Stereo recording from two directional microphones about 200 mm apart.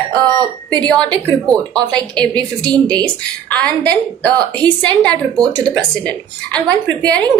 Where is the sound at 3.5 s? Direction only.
5° left (ahead or behind).